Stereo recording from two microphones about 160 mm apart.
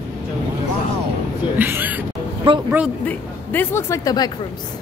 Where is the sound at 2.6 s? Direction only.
10° right (ahead or behind).